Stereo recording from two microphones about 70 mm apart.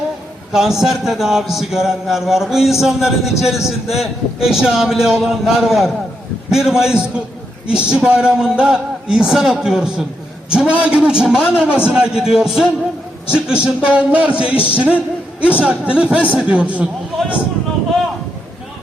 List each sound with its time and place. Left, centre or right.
0.5 s a man's voice: centre